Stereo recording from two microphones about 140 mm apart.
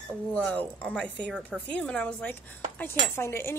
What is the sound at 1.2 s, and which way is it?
Speech, 10° right (ahead or behind).